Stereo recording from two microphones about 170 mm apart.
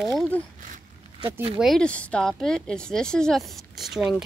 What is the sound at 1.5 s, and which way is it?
Speech, centre (ahead or behind).